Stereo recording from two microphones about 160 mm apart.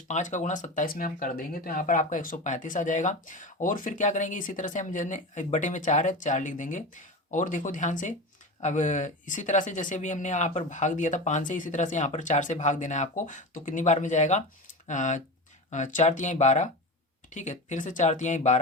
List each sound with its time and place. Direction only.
0.1 s speech: 50° left (ahead or behind)